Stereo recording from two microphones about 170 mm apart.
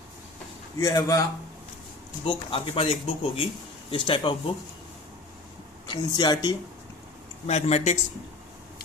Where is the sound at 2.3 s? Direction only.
30° left (ahead or behind).